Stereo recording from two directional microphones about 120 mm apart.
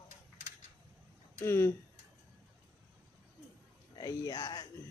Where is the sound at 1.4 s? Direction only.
20° left (ahead or behind).